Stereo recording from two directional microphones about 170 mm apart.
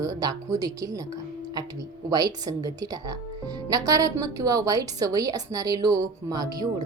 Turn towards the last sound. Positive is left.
turn(degrees=-25)  # may be behind; listen again after turning